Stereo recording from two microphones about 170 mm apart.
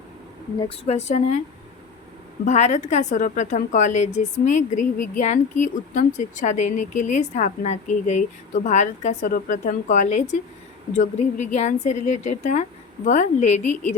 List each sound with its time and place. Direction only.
0.9 s speech: 40° left (ahead or behind)
2.4 s a woman's voice: 45° left (ahead or behind)